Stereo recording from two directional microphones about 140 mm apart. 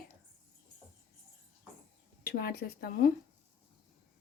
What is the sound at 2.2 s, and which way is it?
Speech, 90° left.